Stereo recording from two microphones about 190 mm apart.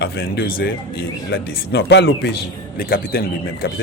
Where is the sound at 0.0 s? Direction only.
60° left (ahead or behind).